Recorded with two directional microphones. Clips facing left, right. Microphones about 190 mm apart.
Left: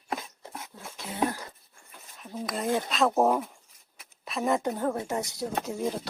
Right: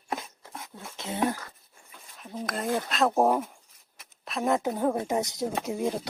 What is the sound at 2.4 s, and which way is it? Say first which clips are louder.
A woman's voice: left 1 dB; centre (ahead or behind).